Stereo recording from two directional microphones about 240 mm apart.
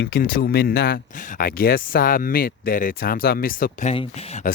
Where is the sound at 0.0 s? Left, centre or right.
Left.